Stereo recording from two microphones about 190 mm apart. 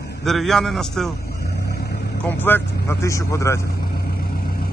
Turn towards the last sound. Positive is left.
turn(degrees=15)  # may be behind; listen again after turning